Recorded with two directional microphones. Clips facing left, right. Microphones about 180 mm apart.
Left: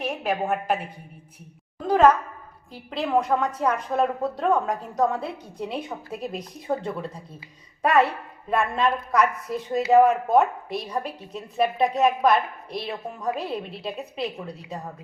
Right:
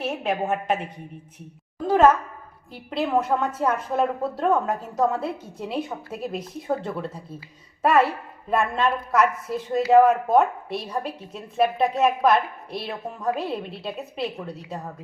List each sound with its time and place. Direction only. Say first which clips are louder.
0.0 s a woman's voice: right 1 dB; centre (ahead or behind)
1.9 s a woman's voice: even; 5° right (ahead or behind)